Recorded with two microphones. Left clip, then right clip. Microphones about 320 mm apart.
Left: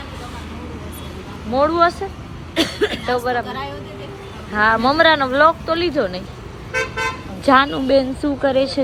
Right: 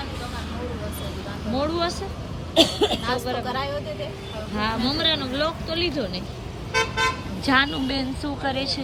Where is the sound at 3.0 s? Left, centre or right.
Centre.